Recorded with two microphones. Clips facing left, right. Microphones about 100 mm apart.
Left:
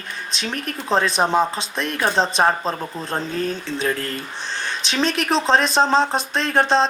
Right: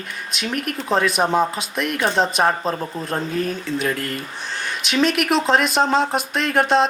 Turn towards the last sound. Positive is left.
turn(degrees=30)  # may be behind; listen again after turning